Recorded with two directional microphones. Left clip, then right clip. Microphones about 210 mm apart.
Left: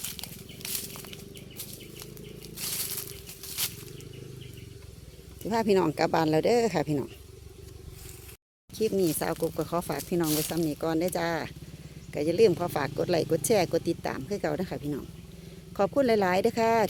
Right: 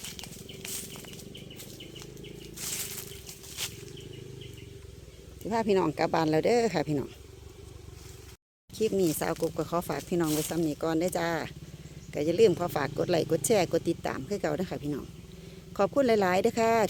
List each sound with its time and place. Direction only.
0.0 s wild animals: 20° left (ahead or behind)
2.6 s a sound: 10° left (ahead or behind)
3.4 s wild animals: 20° left (ahead or behind)
5.5 s speech: 5° left (ahead or behind)
8.7 s speech: centre (ahead or behind)